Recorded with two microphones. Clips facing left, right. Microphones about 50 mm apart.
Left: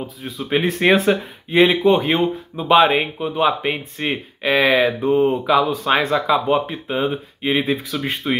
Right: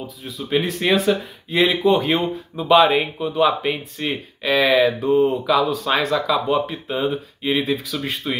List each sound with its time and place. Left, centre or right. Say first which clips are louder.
0.0 s speech: left 3 dB; left
2.0 s speech: left 2 dB; centre